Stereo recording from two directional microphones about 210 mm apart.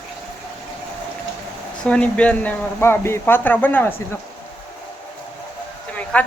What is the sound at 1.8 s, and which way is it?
Speech, 5° left (ahead or behind).